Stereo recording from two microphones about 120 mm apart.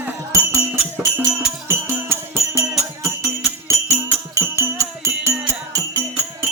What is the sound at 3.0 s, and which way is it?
Music, 25° right (ahead or behind).